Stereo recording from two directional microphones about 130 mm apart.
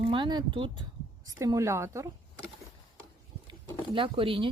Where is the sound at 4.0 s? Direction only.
40° right (ahead or behind).